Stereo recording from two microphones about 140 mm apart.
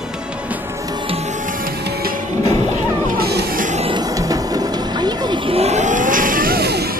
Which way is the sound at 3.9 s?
25° right (ahead or behind).